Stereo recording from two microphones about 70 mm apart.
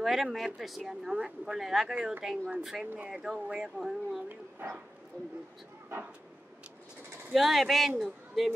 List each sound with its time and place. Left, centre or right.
0.0 s speech: centre
4.6 s speech: right
7.3 s a man's voice: centre